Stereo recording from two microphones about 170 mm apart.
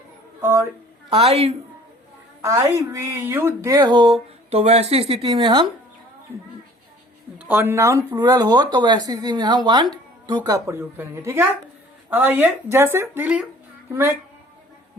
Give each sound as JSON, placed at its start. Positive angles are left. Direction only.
{"t": 0.4, "sound": "speech", "side_deg": -15}
{"t": 1.1, "sound": "speech", "side_deg": -35}
{"t": 2.4, "sound": "speech", "side_deg": -15}
{"t": 4.4, "sound": "speech", "side_deg": -40}
{"t": 7.3, "sound": "speech", "side_deg": -10}